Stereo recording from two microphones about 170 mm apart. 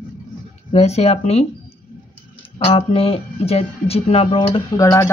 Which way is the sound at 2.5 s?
35° left (ahead or behind).